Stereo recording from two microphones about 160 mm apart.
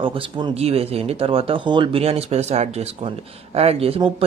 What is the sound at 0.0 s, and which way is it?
Speech, 35° right (ahead or behind).